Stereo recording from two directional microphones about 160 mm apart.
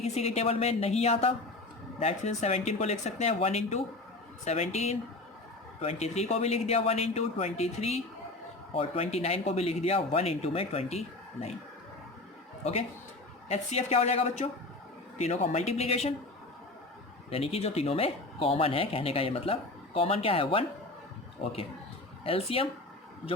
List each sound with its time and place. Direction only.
0.0 s speech: 40° left (ahead or behind)
13.5 s speech: 40° left (ahead or behind)
17.2 s speech: 40° left (ahead or behind)
22.2 s speech: 35° left (ahead or behind)